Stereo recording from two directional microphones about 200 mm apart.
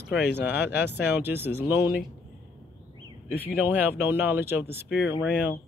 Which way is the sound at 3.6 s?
10° right (ahead or behind).